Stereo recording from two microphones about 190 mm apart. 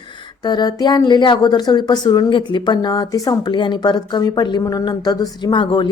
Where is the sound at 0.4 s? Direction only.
20° left (ahead or behind).